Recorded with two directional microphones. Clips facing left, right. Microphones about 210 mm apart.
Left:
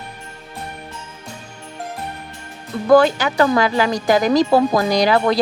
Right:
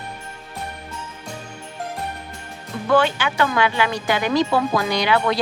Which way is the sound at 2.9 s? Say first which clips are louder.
Left 6 dB; 40° left (ahead or behind).